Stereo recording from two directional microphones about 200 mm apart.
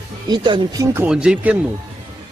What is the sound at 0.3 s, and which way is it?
Speech, 25° right (ahead or behind).